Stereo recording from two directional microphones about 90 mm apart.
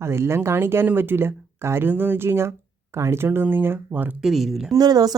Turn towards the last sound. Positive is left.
turn(degrees=-45)  # may be behind; listen again after turning